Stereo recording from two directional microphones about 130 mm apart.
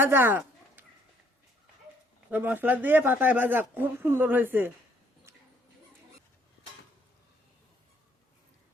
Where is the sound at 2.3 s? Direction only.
15° right (ahead or behind).